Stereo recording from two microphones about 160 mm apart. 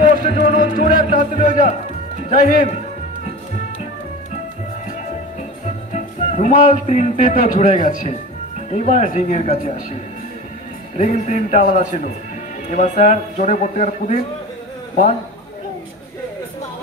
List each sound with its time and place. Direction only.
0.0 s music: 50° left (ahead or behind)
1.0 s speech: 50° left (ahead or behind)
5.9 s speech: 45° left (ahead or behind)
11.0 s speech: 45° left (ahead or behind)